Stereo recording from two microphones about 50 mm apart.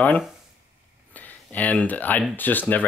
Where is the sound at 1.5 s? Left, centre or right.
Left.